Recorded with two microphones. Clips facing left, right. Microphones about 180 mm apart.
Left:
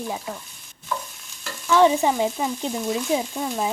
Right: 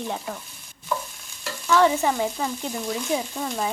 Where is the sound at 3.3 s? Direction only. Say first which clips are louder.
Left 2 dB; 5° left (ahead or behind).